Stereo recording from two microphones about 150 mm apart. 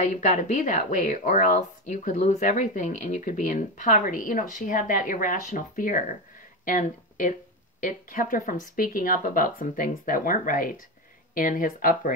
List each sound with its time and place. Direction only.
0.1 s speech: 55° left (ahead or behind)